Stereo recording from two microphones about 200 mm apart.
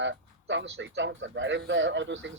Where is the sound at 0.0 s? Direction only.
70° right (ahead or behind).